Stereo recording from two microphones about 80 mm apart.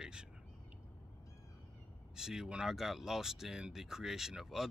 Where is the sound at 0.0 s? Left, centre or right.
Centre.